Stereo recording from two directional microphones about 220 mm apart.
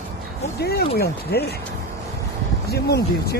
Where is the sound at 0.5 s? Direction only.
45° left (ahead or behind).